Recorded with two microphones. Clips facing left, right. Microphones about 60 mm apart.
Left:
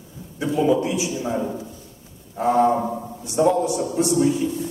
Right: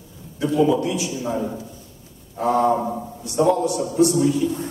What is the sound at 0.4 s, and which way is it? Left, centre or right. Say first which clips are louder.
Speech: right 1 dB; left.